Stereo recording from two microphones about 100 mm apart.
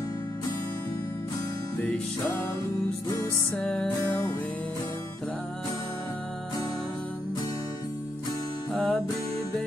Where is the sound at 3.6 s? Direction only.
10° left (ahead or behind).